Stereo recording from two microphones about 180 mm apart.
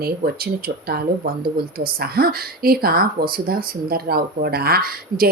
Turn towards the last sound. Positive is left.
turn(degrees=-55)  # may be behind; listen again after turning